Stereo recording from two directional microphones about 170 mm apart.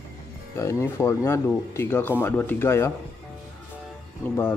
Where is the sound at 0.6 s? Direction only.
15° left (ahead or behind).